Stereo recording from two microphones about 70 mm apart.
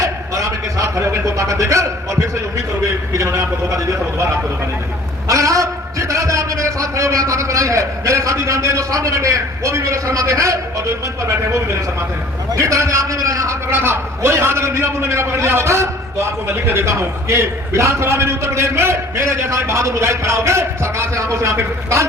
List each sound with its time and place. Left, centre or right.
0.0 s a sound: right
1.0 s a man's voice: right
3.1 s a man's voice: right
5.3 s a man's voice: right
12.5 s a man's voice: right
13.7 s a man's voice: right